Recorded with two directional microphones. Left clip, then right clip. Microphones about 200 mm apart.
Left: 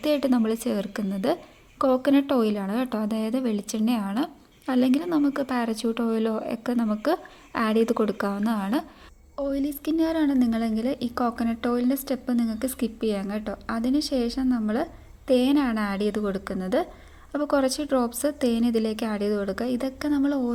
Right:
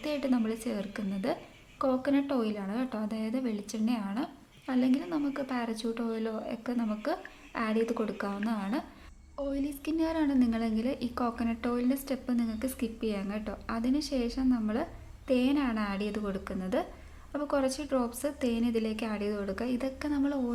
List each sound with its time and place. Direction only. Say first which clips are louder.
0.0 s a woman's voice: left 8 dB; 35° left (ahead or behind)